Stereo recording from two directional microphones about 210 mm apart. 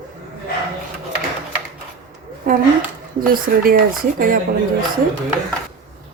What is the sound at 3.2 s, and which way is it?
Speech, 45° right (ahead or behind).